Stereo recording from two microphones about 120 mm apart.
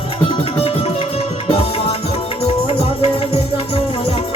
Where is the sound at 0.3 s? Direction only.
50° left (ahead or behind).